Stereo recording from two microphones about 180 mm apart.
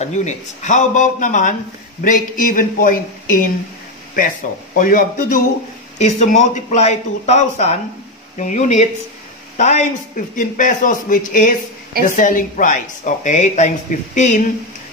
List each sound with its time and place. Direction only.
0.0 s a woman's voice: 40° left (ahead or behind)
4.7 s a woman's voice: 50° left (ahead or behind)